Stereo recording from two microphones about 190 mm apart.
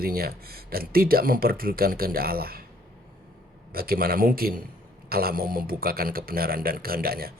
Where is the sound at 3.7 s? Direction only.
50° right (ahead or behind).